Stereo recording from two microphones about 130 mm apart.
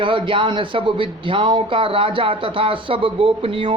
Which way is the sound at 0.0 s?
40° right (ahead or behind).